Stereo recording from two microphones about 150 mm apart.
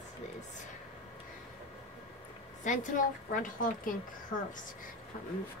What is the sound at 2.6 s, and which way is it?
A woman's voice, 60° left (ahead or behind).